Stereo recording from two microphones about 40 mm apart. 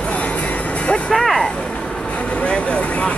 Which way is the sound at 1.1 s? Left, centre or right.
Centre.